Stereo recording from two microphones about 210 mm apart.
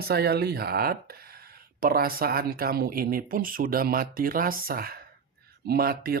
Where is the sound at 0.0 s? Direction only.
50° right (ahead or behind).